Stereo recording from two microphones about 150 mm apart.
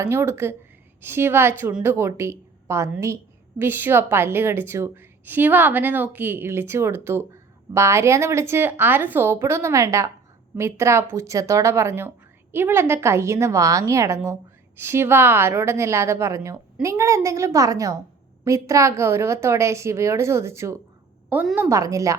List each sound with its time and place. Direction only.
0.0 s a woman's voice: 15° right (ahead or behind)